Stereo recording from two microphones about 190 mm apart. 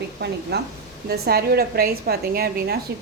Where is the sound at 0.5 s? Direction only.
60° right (ahead or behind).